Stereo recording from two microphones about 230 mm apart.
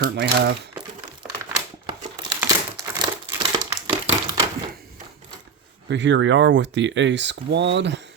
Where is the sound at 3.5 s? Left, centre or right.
Right.